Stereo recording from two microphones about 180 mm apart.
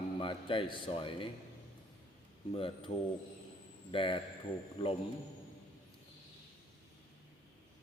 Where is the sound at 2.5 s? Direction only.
30° left (ahead or behind).